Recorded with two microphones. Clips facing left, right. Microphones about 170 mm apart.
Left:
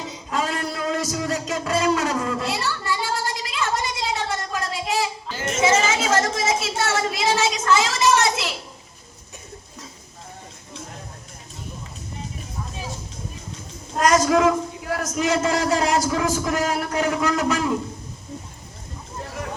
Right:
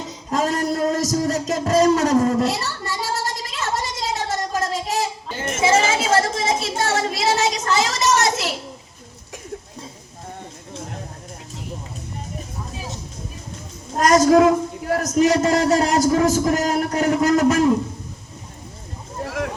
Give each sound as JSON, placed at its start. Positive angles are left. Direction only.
{"t": 0.3, "sound": "a sound", "side_deg": -40}
{"t": 5.4, "sound": "a woman's voice", "side_deg": -30}
{"t": 13.9, "sound": "a man's voice", "side_deg": -40}